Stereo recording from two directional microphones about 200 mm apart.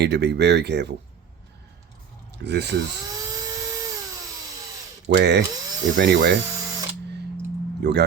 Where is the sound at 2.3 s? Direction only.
60° right (ahead or behind).